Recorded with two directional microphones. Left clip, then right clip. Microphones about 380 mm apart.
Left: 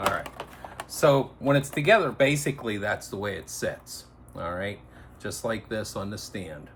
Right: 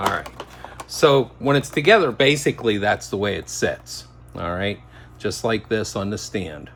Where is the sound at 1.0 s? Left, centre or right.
Right.